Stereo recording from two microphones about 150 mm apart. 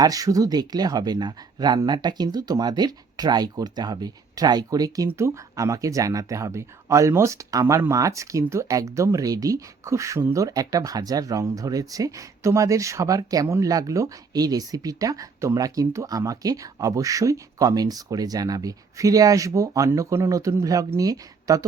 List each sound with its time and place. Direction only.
0.0 s speech: 25° right (ahead or behind)